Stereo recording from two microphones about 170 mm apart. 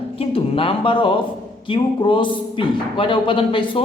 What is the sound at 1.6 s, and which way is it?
A man's voice, 30° left (ahead or behind).